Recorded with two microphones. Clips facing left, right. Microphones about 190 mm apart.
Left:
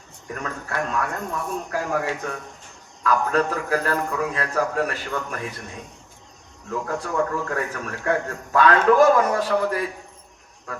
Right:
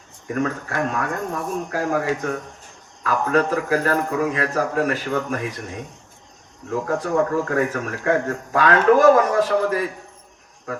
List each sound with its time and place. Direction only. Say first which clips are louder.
0.3 s a man's voice: right 5 dB; 45° right (ahead or behind)
6.7 s a man's voice: right 5 dB; 40° right (ahead or behind)